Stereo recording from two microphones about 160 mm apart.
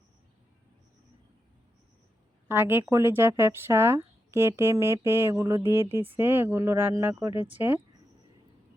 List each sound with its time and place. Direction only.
2.5 s speech: 15° right (ahead or behind)